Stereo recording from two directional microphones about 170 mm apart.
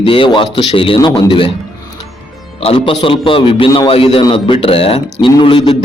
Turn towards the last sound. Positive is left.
turn(degrees=25)  # may be behind; listen again after turning